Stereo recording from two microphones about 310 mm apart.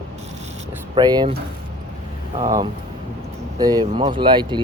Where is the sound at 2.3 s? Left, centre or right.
Centre.